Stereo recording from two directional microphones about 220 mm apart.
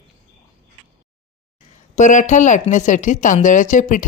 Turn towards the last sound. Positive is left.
turn(degrees=35)  # may be behind; listen again after turning